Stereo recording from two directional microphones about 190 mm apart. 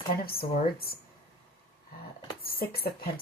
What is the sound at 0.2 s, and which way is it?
Speech, 50° left (ahead or behind).